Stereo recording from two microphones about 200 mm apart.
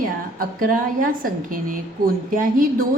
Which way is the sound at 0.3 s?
45° right (ahead or behind).